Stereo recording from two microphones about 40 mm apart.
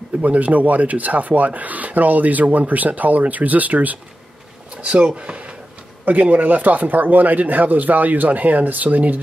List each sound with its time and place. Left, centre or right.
0.2 s speech: right
4.8 s speech: right
6.0 s speech: right